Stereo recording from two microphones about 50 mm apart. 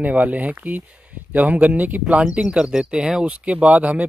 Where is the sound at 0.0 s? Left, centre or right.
Right.